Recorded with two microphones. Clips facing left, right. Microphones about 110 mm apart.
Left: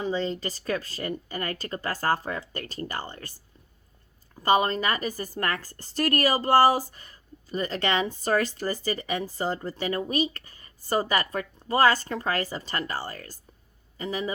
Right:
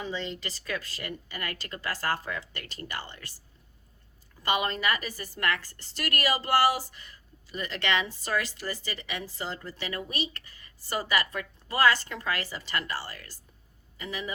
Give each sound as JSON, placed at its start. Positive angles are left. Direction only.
{"t": 0.0, "sound": "a woman's voice", "side_deg": 40}
{"t": 4.4, "sound": "a woman's voice", "side_deg": 35}